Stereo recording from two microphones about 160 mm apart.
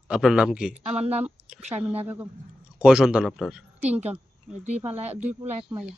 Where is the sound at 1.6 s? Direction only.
45° right (ahead or behind).